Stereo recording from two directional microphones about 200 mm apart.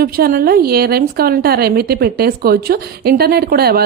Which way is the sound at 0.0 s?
45° right (ahead or behind).